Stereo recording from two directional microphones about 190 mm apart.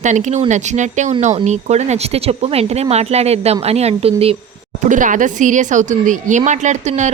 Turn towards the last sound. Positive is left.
turn(degrees=-40)  # may be behind; listen again after turning